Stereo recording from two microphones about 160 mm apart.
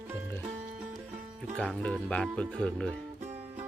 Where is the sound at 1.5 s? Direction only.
5° left (ahead or behind).